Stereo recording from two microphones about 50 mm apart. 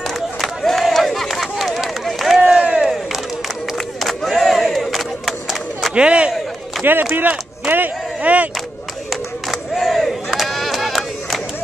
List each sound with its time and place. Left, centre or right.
0.1 s crowd: centre
2.4 s crowd: centre
2.9 s crowd: centre
5.9 s a man's voice: right
6.8 s speech: right
7.2 s a sound: right
9.1 s crowd: centre